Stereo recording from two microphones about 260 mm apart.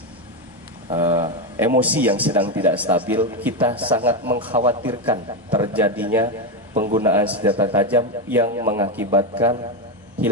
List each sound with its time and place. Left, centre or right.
0.9 s a man's voice: centre
4.5 s a man's voice: right
6.7 s a man's voice: right
7.0 s a man's voice: centre
7.7 s a man's voice: centre